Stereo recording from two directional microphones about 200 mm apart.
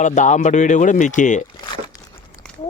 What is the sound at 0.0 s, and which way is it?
Speech, 35° left (ahead or behind).